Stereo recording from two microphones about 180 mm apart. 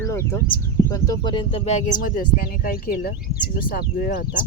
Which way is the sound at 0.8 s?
15° left (ahead or behind).